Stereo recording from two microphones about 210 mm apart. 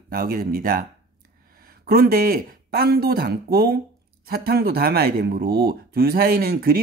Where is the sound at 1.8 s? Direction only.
45° right (ahead or behind).